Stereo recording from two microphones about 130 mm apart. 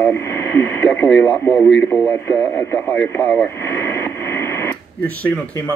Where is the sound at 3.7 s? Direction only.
20° left (ahead or behind).